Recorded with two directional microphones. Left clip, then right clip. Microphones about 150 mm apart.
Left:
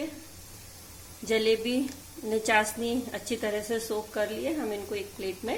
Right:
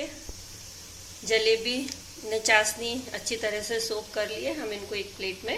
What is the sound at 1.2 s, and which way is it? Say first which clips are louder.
A woman's voice: right 2 dB; 80° left.